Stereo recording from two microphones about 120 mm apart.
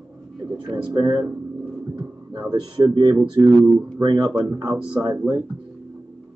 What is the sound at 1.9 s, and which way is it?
Speech, 35° right (ahead or behind).